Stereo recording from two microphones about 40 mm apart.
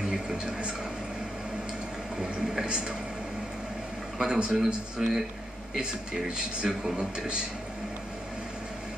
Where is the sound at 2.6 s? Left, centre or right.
Right.